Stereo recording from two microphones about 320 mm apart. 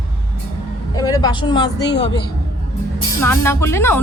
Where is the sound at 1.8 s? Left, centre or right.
Left.